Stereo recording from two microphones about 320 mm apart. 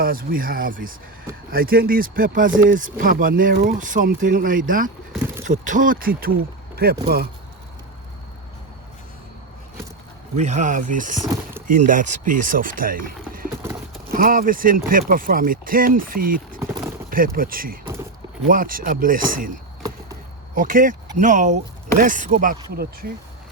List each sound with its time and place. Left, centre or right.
0.0 s speech: right
5.1 s a sound: centre
5.5 s speech: right
10.3 s speech: right
11.2 s speech: centre
11.7 s speech: right
20.6 s speech: right